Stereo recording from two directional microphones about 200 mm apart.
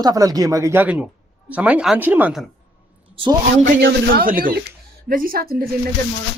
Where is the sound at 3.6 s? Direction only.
50° right (ahead or behind).